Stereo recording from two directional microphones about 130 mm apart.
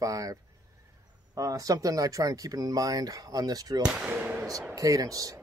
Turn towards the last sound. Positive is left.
turn(degrees=-25)  # may be behind; listen again after turning